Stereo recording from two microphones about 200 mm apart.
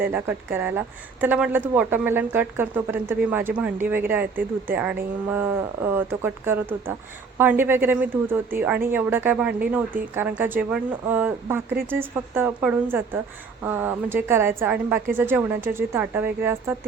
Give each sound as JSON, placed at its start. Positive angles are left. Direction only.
{"t": 0.0, "sound": "speech", "side_deg": -10}